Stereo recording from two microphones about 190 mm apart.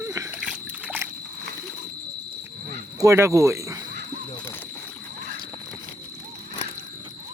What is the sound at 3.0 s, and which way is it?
Speech, 15° right (ahead or behind).